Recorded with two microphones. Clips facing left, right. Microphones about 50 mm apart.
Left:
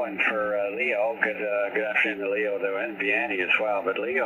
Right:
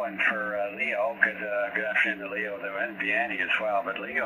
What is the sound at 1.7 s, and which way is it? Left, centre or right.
Speech, centre.